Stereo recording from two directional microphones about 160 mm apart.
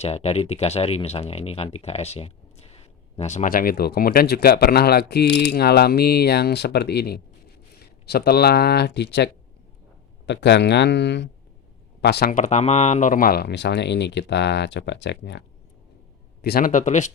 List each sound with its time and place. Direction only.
0.0 s speech: 40° left (ahead or behind); by 12.4 s 80° left
12.4 s speech: 45° left (ahead or behind); by 15.4 s 90° left
16.4 s a man's voice: 75° left (ahead or behind); by 17.1 s 50° left (ahead or behind)